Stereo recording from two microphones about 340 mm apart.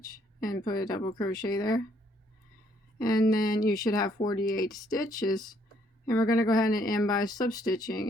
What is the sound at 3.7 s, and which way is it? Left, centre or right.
Speech, centre.